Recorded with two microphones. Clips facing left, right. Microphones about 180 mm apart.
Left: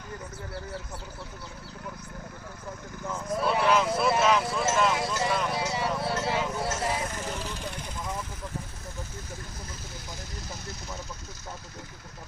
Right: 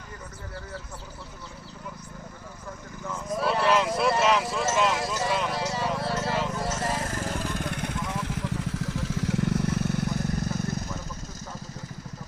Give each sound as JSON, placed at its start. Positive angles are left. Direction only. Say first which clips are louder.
{"t": 3.3, "sound": "clip-clop", "louder": "right 1 dB", "side_deg": 0}
{"t": 5.8, "sound": "a sound", "louder": "right 1 dB", "side_deg": 5}
{"t": 7.1, "sound": "vehicle", "louder": "right 4 dB", "side_deg": -50}